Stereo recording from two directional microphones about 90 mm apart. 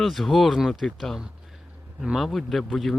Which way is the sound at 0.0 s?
Centre (ahead or behind).